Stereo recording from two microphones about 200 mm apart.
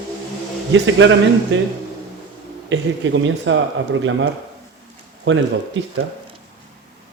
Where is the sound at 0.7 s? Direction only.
70° right (ahead or behind).